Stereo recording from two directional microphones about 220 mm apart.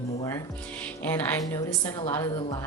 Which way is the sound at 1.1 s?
10° left (ahead or behind).